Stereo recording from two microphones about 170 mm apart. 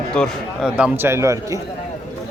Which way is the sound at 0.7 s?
10° right (ahead or behind).